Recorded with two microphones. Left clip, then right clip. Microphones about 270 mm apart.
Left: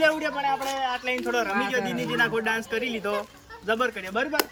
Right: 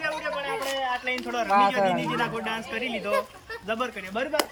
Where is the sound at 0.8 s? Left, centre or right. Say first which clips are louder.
Left 1 dB; centre.